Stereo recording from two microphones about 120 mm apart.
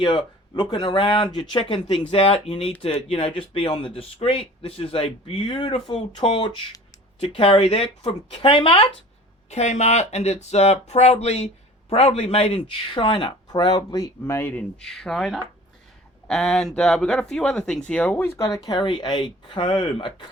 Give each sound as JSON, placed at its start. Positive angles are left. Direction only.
{"t": 0.0, "sound": "speech", "side_deg": 40}
{"t": 9.5, "sound": "speech", "side_deg": 70}
{"t": 18.8, "sound": "speech", "side_deg": 40}